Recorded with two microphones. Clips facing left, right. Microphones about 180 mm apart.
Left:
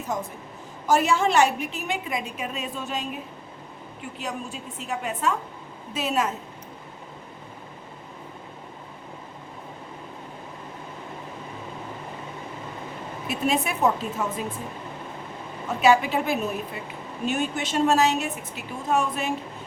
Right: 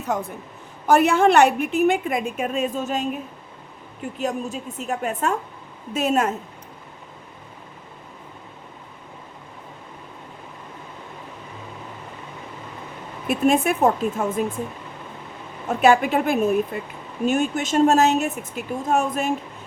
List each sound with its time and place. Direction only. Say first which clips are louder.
0.1 s a woman's voice: right 4 dB; 60° right (ahead or behind); by 3.1 s 45° right (ahead or behind)
4.2 s a woman's voice: right 7 dB; 45° right (ahead or behind)
13.2 s a woman's voice: right 7 dB; 50° right (ahead or behind)
15.8 s a woman's voice: right 3 dB; 50° right (ahead or behind)